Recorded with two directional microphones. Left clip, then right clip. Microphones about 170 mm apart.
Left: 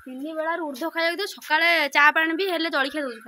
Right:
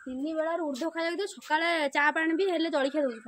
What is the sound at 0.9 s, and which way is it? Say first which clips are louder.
A woman's voice: left 6 dB; 10° right (ahead or behind).